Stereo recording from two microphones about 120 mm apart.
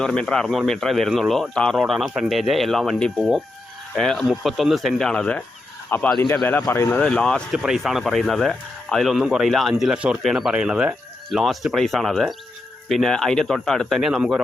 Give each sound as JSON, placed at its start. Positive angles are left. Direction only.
{"t": 0.0, "sound": "speech", "side_deg": 5}
{"t": 5.9, "sound": "speech", "side_deg": 20}
{"t": 7.0, "sound": "speech", "side_deg": 10}
{"t": 7.5, "sound": "speech", "side_deg": -5}